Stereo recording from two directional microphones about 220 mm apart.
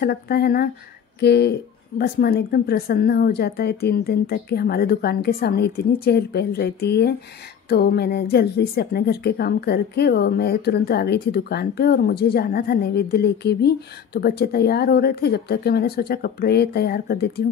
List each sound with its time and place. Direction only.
0.0 s a woman's voice: 45° left (ahead or behind)